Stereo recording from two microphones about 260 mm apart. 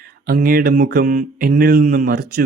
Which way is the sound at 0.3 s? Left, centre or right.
Right.